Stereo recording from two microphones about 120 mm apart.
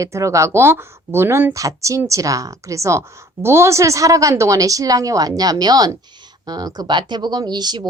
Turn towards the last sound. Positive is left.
turn(degrees=-35)  # may be behind; listen again after turning